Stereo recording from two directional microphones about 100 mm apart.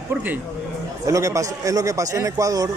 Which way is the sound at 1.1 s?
30° right (ahead or behind).